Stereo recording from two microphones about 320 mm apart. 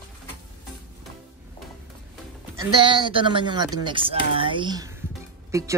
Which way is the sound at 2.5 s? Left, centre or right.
Centre.